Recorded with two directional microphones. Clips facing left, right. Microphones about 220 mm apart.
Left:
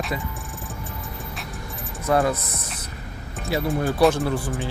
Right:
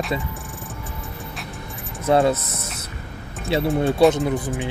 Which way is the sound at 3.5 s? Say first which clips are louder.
Right 3 dB; 25° right (ahead or behind).